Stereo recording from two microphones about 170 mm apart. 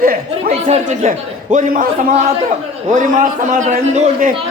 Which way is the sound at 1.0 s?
45° right (ahead or behind).